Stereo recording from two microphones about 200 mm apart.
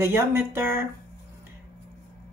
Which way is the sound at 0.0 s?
10° right (ahead or behind).